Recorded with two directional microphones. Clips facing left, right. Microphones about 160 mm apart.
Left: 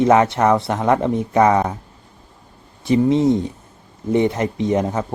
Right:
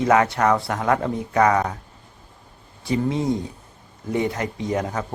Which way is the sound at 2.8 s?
20° left (ahead or behind).